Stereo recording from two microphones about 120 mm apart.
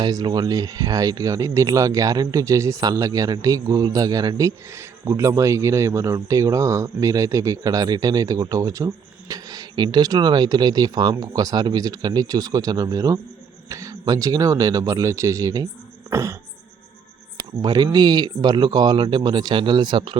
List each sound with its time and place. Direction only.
0.0 s speech: 35° right (ahead or behind)
16.0 s cough: 25° right (ahead or behind)
17.6 s speech: 35° right (ahead or behind)